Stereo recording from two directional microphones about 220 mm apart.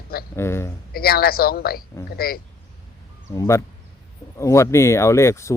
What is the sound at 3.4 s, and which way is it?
Speech, 15° left (ahead or behind).